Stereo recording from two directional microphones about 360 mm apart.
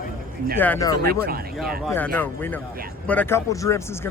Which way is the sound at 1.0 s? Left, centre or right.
Right.